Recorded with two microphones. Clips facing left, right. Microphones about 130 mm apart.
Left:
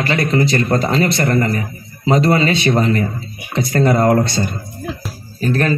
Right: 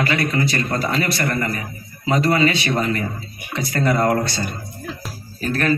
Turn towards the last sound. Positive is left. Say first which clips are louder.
# left 3 dB
turn(degrees=30)  # may be behind; listen again after turning